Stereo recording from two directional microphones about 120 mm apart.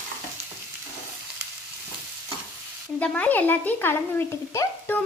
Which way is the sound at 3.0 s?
10° left (ahead or behind).